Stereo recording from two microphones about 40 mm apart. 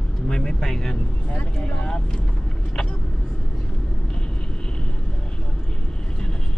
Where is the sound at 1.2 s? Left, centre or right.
Left.